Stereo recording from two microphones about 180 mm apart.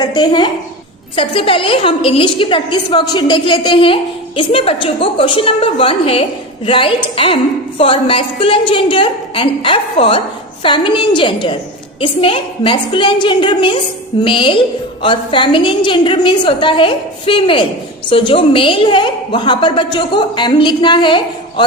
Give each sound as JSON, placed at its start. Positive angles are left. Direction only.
{"t": 0.0, "sound": "a woman's voice", "side_deg": 25}